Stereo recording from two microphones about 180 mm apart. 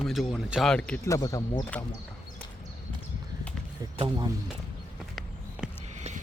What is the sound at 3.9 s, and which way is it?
Speech, 25° right (ahead or behind).